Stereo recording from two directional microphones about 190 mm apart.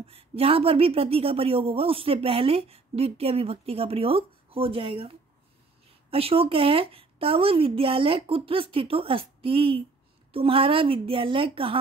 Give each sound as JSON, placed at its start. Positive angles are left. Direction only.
{"t": 0.0, "sound": "speech", "side_deg": -30}